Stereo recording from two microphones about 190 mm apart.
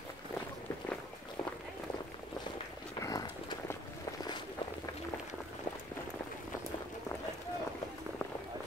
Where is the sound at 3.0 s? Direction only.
20° left (ahead or behind).